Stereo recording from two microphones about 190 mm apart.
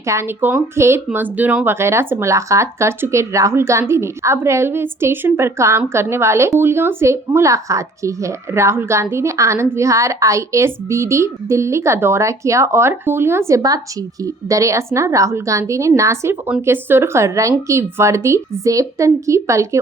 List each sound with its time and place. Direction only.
0.0 s speech: 15° right (ahead or behind)